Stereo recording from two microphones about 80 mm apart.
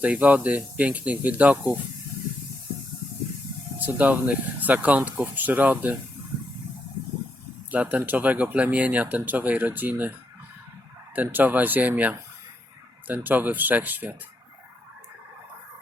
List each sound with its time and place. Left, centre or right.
0.0 s speech: centre
3.8 s speech: right
7.7 s speech: centre